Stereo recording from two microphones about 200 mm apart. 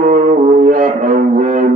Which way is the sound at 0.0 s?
40° right (ahead or behind).